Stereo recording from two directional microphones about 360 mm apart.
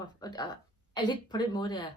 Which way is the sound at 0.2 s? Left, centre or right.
Centre.